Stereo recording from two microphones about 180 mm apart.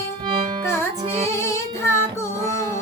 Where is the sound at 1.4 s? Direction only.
15° left (ahead or behind).